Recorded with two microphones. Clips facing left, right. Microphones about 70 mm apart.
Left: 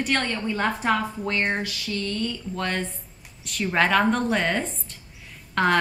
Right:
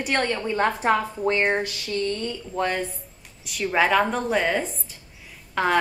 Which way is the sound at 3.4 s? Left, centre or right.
Centre.